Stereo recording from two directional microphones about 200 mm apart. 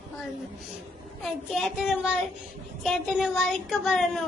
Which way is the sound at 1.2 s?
Centre (ahead or behind).